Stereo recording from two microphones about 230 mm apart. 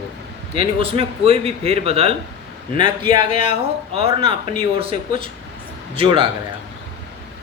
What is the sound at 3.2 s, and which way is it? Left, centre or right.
A woman's voice, right.